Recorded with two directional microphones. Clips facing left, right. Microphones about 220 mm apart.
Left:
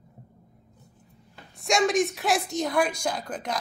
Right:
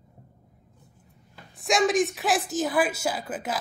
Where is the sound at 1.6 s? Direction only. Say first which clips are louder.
Even; centre (ahead or behind).